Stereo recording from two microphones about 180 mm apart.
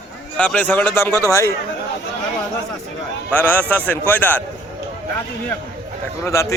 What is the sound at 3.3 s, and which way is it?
Speech, 10° left (ahead or behind).